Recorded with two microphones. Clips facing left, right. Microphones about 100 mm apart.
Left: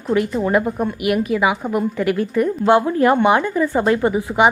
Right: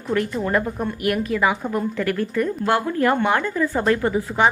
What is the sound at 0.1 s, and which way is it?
A woman's voice, 10° left (ahead or behind).